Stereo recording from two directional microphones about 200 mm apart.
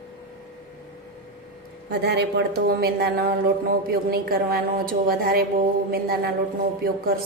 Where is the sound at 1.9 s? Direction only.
55° right (ahead or behind).